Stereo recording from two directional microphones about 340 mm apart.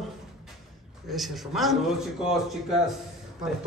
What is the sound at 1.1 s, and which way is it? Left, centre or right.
Speech, centre.